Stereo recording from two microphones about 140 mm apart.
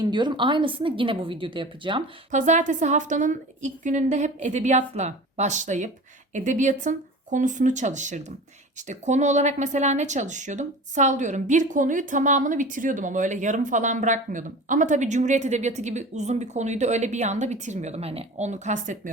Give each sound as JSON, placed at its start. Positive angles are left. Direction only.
{"t": 0.0, "sound": "a woman's voice", "side_deg": -30}
{"t": 2.3, "sound": "speech", "side_deg": -60}